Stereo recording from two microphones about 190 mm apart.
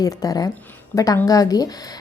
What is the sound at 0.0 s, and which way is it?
A woman's voice, 20° left (ahead or behind).